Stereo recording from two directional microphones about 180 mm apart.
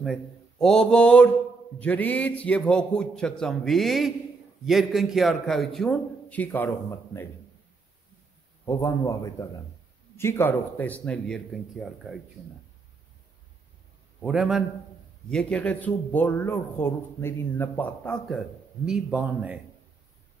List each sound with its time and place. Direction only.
0.0 s a man's voice: centre (ahead or behind)
8.6 s a man's voice: 15° left (ahead or behind); by 12.2 s centre (ahead or behind)
14.2 s a man's voice: 5° right (ahead or behind)